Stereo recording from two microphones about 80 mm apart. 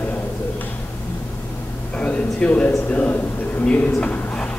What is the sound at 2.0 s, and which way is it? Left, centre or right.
A man's voice, centre.